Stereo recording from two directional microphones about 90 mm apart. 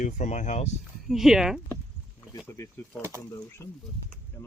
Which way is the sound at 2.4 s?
35° left (ahead or behind).